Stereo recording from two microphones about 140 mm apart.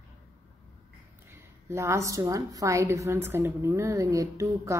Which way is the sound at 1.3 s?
20° right (ahead or behind).